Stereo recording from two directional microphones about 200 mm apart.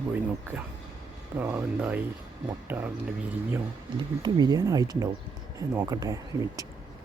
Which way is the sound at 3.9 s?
20° right (ahead or behind).